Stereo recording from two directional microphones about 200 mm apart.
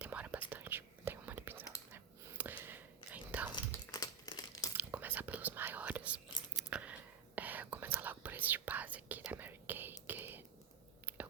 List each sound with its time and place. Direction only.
0.0 s whispering: 5° right (ahead or behind)
3.9 s crumpling: 20° left (ahead or behind)
4.8 s whispering: 10° right (ahead or behind)
10.1 s a sound: 10° right (ahead or behind)